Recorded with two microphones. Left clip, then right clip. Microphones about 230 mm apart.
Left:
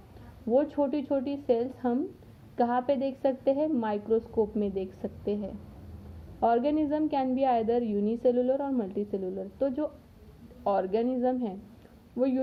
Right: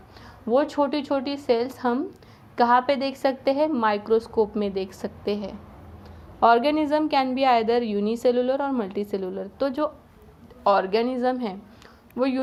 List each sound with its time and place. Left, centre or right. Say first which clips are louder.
0.5 s a woman's voice: right 5 dB; centre